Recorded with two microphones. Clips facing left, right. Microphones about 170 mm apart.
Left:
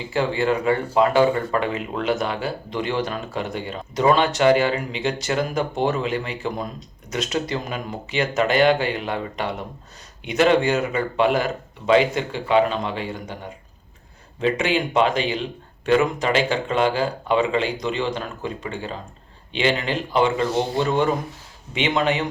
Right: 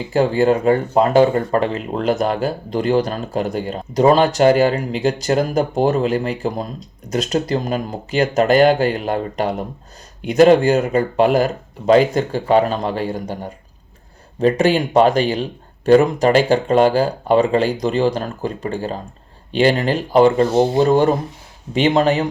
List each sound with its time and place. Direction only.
0.1 s speech: 40° right (ahead or behind)